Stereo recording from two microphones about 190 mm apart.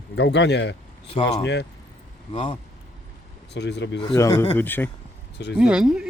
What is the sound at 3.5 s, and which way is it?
Speech, 65° left (ahead or behind).